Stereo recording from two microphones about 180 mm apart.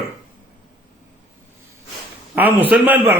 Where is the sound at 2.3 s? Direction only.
10° right (ahead or behind).